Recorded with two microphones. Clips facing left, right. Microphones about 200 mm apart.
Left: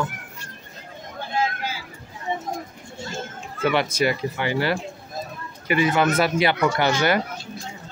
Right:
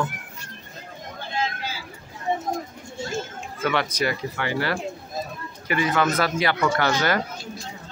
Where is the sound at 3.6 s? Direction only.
20° left (ahead or behind).